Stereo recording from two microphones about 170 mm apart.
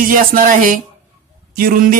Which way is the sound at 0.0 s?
55° right (ahead or behind).